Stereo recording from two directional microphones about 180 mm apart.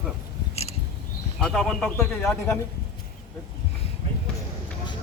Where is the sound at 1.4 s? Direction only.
Centre (ahead or behind).